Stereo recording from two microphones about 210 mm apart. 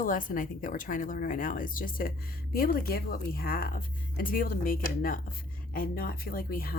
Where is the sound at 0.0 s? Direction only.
40° left (ahead or behind).